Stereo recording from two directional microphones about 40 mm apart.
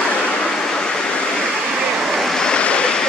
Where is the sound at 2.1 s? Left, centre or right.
Centre.